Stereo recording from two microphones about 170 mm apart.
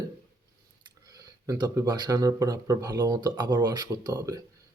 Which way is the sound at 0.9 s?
20° right (ahead or behind).